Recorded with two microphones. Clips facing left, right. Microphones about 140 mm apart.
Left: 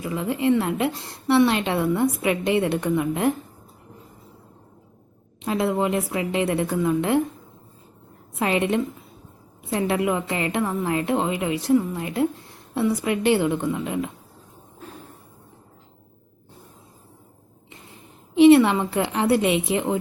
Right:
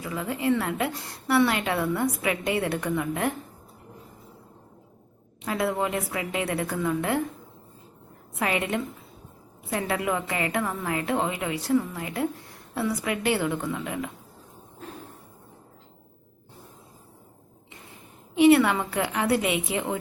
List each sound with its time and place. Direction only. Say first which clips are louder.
0.0 s a woman's voice: left 5 dB; 20° left (ahead or behind)
5.4 s a woman's voice: left 4 dB; 20° left (ahead or behind)
8.4 s a woman's voice: left 5 dB; 25° left (ahead or behind)
18.3 s a woman's voice: left 5 dB; 25° left (ahead or behind)